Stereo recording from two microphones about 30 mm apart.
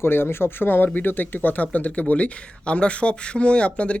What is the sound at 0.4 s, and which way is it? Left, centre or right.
Speech, left.